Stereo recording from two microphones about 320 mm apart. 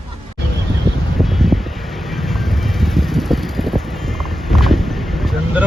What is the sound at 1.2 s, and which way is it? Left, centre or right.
Vehicle, centre.